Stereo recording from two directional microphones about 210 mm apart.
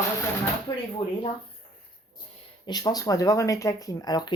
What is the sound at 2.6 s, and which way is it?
Speech, 20° left (ahead or behind).